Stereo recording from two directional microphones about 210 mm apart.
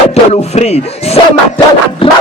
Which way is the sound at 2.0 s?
25° left (ahead or behind).